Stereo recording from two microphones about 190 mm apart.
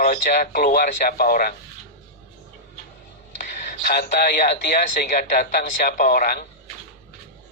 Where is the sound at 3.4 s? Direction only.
50° left (ahead or behind).